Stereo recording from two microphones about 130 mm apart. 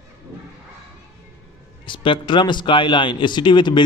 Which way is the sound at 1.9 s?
40° left (ahead or behind).